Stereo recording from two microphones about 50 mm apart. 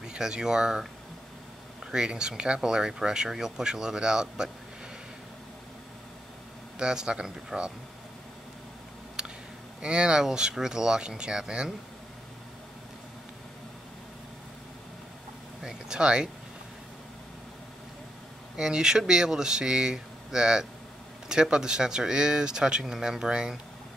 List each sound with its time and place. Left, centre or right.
0.0 s speech: centre
1.9 s speech: centre
6.8 s speech: centre
9.2 s a sound: centre
9.8 s speech: centre
15.6 s speech: centre
18.6 s speech: centre